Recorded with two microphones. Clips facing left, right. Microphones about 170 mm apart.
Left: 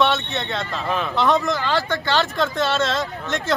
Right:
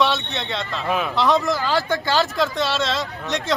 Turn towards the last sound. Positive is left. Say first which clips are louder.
# even
turn(degrees=0)  # may be behind; listen again after turning